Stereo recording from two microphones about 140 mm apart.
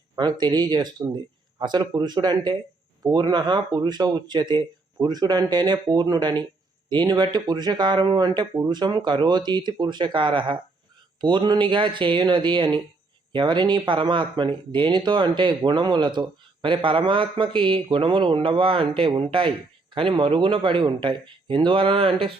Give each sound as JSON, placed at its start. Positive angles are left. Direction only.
{"t": 0.2, "sound": "speech", "side_deg": -30}